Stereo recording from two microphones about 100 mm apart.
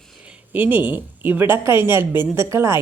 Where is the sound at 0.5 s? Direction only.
20° right (ahead or behind).